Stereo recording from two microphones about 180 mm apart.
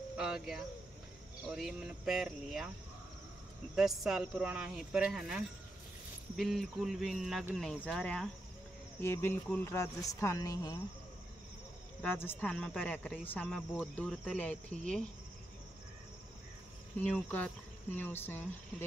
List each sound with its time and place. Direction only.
0.2 s speech: centre (ahead or behind)
3.7 s speech: centre (ahead or behind); by 10.8 s 20° left (ahead or behind)
12.0 s speech: 10° left (ahead or behind)
17.0 s speech: 10° left (ahead or behind)